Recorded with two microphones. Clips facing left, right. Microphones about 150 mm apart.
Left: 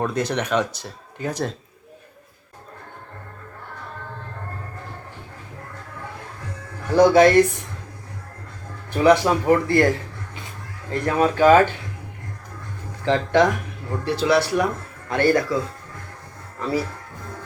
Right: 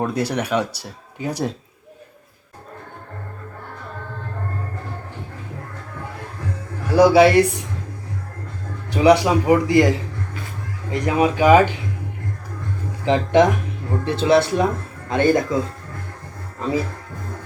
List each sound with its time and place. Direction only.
0.0 s speech: 10° right (ahead or behind)
6.8 s speech: 10° right (ahead or behind)
8.9 s speech: 15° right (ahead or behind)
10.9 s speech: 15° right (ahead or behind)
13.1 s speech: 20° right (ahead or behind)